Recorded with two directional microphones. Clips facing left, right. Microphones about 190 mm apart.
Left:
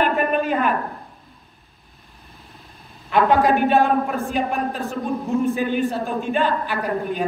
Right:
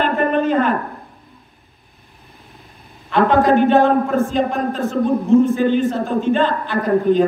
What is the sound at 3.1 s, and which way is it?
A woman's voice, 15° left (ahead or behind).